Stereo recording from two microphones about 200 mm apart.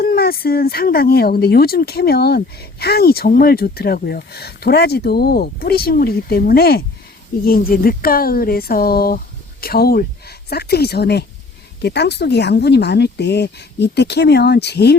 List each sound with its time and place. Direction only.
0.0 s speech: 50° left (ahead or behind)